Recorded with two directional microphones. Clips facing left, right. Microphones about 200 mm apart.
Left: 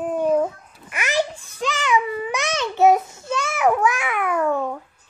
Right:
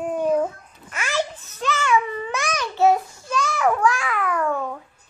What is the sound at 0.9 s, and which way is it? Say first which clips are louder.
Babbling: left 2 dB; 15° left (ahead or behind).